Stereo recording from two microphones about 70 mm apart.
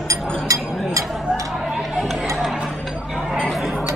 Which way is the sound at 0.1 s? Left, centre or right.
Right.